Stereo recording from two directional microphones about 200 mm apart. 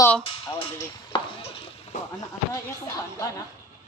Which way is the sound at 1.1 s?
20° left (ahead or behind).